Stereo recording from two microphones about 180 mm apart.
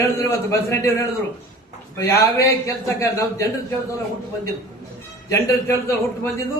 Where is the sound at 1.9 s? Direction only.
15° left (ahead or behind).